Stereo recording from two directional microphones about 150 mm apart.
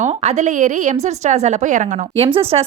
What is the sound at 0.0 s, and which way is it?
Speech, 45° right (ahead or behind).